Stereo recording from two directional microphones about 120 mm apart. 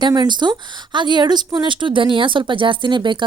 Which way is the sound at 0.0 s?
35° right (ahead or behind).